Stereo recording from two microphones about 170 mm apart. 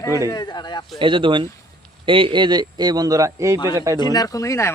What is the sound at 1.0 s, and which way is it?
Speech, 30° right (ahead or behind).